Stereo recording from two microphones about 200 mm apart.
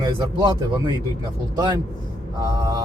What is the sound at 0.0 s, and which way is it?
Speech, 20° right (ahead or behind).